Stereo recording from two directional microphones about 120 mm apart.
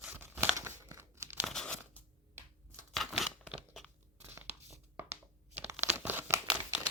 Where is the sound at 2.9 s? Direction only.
Centre (ahead or behind).